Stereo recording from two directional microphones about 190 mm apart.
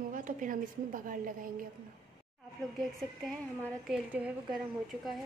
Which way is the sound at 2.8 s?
Centre (ahead or behind).